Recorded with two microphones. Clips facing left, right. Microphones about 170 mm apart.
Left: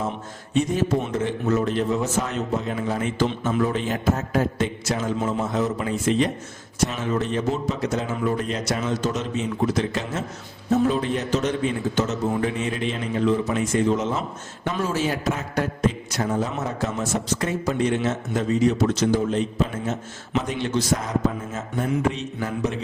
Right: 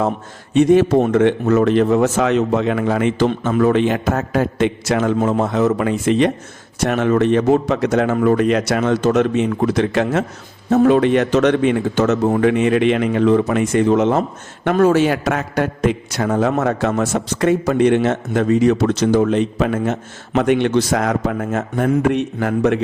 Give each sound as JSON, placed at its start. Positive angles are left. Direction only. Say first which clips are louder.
{"t": 0.5, "sound": "speech", "louder": "right 10 dB", "side_deg": -70}